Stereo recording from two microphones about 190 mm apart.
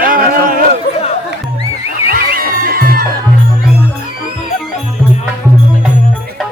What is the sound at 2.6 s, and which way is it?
Music, 50° right (ahead or behind).